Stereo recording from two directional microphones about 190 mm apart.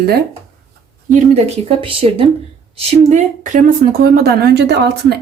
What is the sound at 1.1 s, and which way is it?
Speech, 35° right (ahead or behind).